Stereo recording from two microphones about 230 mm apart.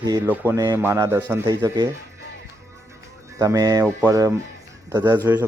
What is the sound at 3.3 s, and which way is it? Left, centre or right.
A man's voice, centre.